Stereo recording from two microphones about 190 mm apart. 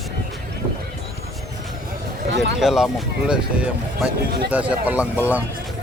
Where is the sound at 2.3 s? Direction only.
65° right (ahead or behind).